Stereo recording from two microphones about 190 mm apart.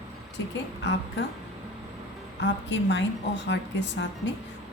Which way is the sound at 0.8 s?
65° left (ahead or behind).